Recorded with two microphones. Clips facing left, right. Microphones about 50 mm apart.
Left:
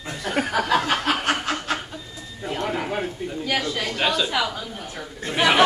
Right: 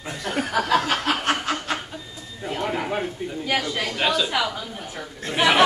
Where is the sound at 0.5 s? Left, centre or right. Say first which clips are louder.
Right 1 dB; centre.